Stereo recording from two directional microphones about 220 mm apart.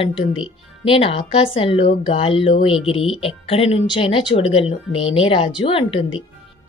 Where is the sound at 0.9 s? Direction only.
25° left (ahead or behind).